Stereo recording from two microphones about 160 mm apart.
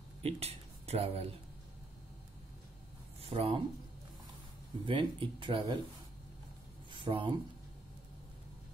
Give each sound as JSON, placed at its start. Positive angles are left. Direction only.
{"t": 0.2, "sound": "a sound", "side_deg": -40}
{"t": 3.2, "sound": "speech", "side_deg": -35}
{"t": 4.8, "sound": "speech", "side_deg": -30}
{"t": 6.9, "sound": "speech", "side_deg": -30}